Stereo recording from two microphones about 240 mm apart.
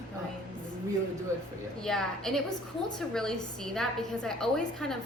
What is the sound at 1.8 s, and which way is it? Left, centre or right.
A woman's voice, centre.